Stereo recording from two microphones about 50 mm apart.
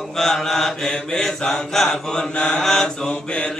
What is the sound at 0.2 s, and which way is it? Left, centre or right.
Mantra, centre.